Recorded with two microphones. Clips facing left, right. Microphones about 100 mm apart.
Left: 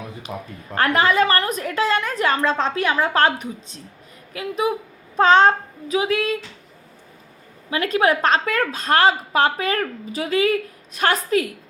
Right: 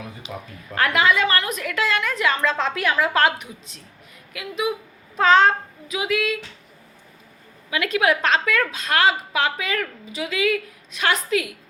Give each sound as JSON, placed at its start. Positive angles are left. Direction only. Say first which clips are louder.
{"t": 0.2, "sound": "a woman's voice", "louder": "left 3 dB", "side_deg": 45}
{"t": 7.7, "sound": "a woman's voice", "louder": "left 2 dB", "side_deg": 35}